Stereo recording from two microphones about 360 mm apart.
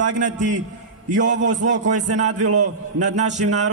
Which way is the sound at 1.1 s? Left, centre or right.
Centre.